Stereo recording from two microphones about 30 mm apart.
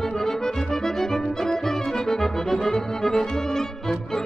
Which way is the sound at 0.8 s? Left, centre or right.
Centre.